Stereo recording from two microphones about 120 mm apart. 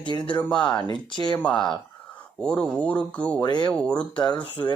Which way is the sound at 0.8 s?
40° left (ahead or behind).